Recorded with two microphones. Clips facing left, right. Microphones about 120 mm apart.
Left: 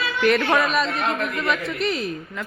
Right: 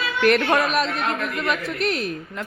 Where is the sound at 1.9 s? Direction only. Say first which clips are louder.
Right 1 dB; 65° right (ahead or behind).